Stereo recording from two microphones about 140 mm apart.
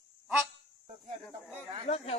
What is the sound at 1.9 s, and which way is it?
Speech, 45° left (ahead or behind).